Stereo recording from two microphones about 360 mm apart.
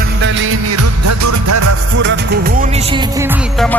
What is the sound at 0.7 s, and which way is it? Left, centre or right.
Music, right.